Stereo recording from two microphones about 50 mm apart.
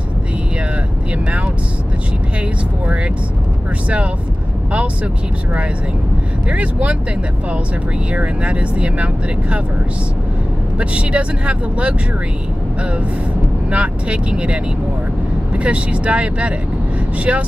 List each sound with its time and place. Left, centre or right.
4.7 s speech: right
8.1 s speech: right
10.8 s speech: right
13.7 s speech: right